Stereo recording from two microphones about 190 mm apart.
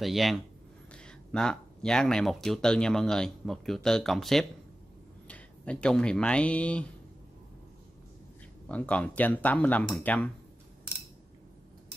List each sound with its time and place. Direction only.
0.0 s speech: centre (ahead or behind)
8.6 s speech: 5° left (ahead or behind)